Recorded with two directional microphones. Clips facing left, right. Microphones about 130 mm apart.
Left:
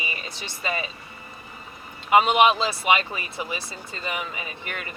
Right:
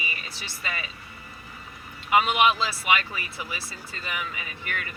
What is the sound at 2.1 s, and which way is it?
Speech, 30° left (ahead or behind).